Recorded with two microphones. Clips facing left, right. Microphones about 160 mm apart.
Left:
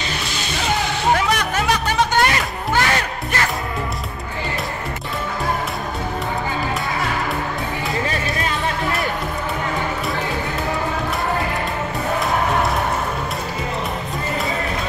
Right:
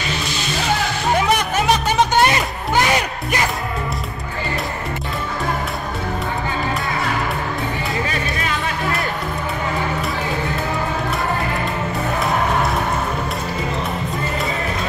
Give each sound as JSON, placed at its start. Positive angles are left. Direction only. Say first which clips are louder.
{"t": 1.1, "sound": "music", "louder": "right 5 dB", "side_deg": -20}